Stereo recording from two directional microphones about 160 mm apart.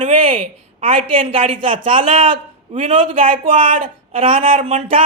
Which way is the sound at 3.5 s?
60° right (ahead or behind).